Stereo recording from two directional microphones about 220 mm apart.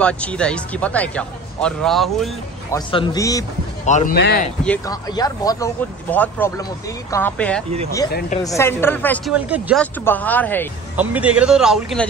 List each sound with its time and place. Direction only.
0.0 s speech: 5° left (ahead or behind)
2.7 s speech: 20° left (ahead or behind)
3.8 s speech: 35° left (ahead or behind)
4.2 s speech: 45° left (ahead or behind)
4.6 s speech: 15° left (ahead or behind)
8.1 s speech: 45° left (ahead or behind)
8.5 s speech: 10° left (ahead or behind)
9.3 s speech: 5° right (ahead or behind)
9.8 s speech: 5° left (ahead or behind)
11.0 s speech: 5° right (ahead or behind)